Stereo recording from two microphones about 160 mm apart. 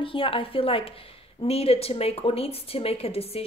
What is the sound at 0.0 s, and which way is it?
Speech, 35° left (ahead or behind).